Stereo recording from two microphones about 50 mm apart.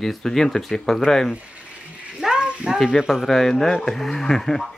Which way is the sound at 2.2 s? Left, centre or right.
Centre.